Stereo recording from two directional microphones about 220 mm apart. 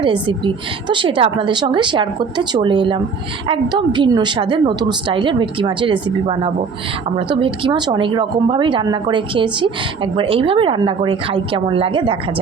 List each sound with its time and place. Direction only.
0.0 s speech: 20° right (ahead or behind)